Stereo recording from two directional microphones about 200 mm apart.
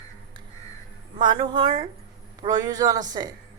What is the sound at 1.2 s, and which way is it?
A man's voice, 25° right (ahead or behind).